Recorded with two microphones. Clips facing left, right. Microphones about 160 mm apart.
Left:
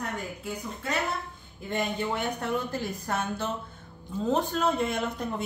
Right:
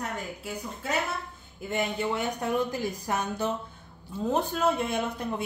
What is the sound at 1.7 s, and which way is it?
A woman's voice, 10° right (ahead or behind).